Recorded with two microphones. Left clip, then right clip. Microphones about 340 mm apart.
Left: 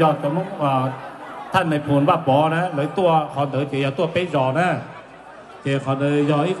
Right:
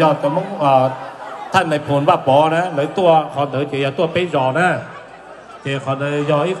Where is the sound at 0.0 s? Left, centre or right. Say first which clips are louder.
Right 4 dB; right.